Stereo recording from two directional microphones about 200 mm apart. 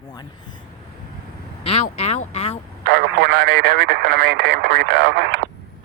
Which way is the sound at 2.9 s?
55° right (ahead or behind).